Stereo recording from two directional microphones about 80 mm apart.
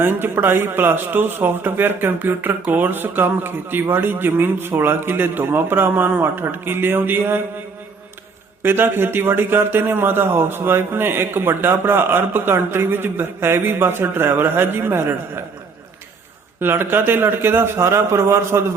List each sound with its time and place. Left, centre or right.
0.0 s a man's voice: right
8.6 s a man's voice: right
16.6 s a man's voice: right